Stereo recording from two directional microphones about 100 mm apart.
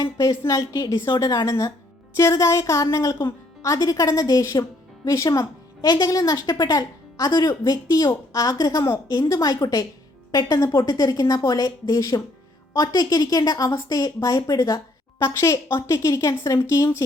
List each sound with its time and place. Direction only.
0.0 s a woman's voice: 35° left (ahead or behind)
7.3 s speech: 30° left (ahead or behind)
9.0 s speech: 40° left (ahead or behind)